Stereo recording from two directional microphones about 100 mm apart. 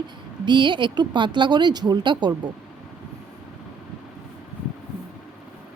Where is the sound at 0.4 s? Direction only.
50° right (ahead or behind).